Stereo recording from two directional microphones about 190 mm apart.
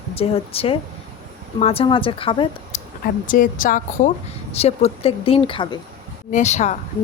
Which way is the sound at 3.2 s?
45° left (ahead or behind).